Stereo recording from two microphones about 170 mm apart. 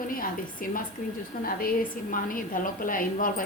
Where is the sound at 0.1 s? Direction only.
55° left (ahead or behind).